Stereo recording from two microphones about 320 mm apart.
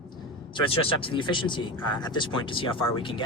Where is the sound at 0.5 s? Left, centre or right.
Centre.